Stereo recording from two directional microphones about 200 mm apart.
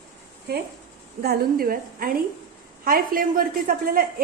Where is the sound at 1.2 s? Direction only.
50° right (ahead or behind).